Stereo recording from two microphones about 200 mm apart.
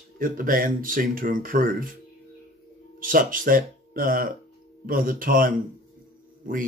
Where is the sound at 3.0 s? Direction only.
45° right (ahead or behind).